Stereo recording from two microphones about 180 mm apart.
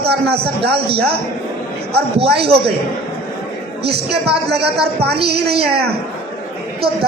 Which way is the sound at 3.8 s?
65° right (ahead or behind).